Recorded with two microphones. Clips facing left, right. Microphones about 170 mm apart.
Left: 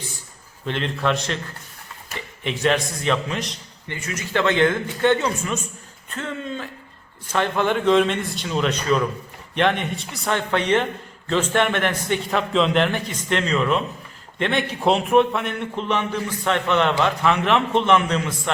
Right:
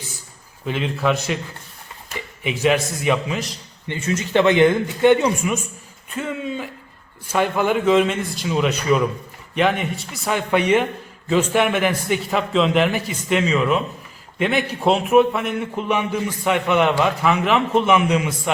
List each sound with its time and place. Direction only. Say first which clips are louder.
0.6 s a man's voice: right 2 dB; 5° right (ahead or behind)
2.4 s a man's voice: right 2 dB; 5° right (ahead or behind)
3.8 s a man's voice: right 7 dB; 25° right (ahead or behind)